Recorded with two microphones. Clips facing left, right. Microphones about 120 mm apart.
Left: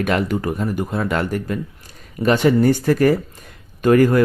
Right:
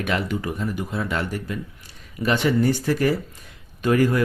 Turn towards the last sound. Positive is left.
turn(degrees=50)  # may be behind; listen again after turning